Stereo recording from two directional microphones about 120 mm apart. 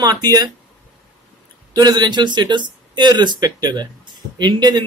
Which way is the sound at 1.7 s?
35° right (ahead or behind).